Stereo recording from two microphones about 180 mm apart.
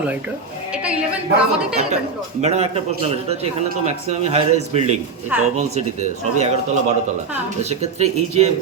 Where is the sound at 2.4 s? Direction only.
35° right (ahead or behind).